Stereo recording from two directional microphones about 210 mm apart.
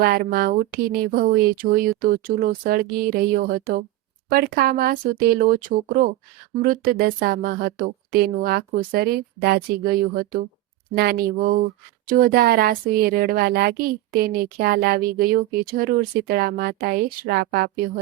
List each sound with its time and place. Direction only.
0.0 s speech: 45° right (ahead or behind)